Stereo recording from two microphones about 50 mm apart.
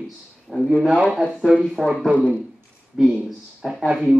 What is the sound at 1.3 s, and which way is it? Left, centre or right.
Speech, centre.